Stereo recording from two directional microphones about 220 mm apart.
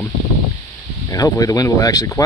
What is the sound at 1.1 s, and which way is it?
Speech, 15° left (ahead or behind).